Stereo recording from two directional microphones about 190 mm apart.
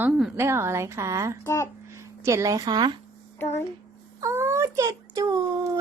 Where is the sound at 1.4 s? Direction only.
15° left (ahead or behind).